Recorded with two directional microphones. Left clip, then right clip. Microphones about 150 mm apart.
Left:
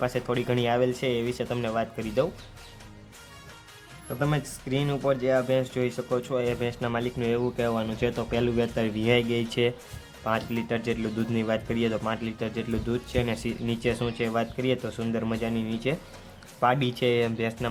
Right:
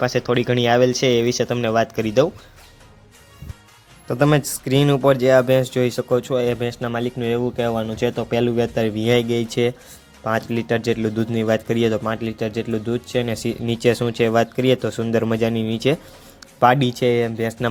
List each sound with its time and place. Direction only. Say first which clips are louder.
0.0 s speech: right 8 dB; 30° right (ahead or behind)
4.2 s speech: right 12 dB; 75° right (ahead or behind); by 17.5 s 30° right (ahead or behind)